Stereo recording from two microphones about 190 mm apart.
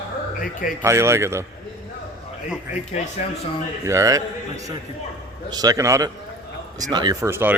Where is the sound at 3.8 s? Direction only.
15° right (ahead or behind).